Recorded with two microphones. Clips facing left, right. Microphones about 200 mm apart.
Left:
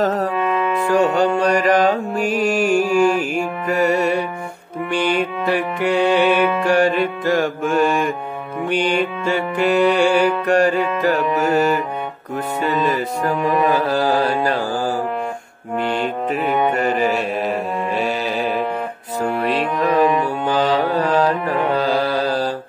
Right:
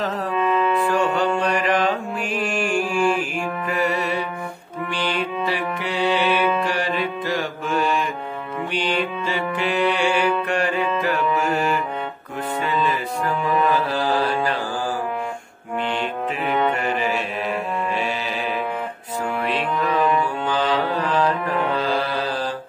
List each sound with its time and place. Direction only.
0.0 s music: 45° left (ahead or behind)
16.7 s music: 40° left (ahead or behind)
19.2 s music: 40° left (ahead or behind)